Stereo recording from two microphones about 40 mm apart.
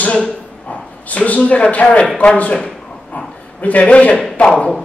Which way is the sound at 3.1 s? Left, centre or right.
Left.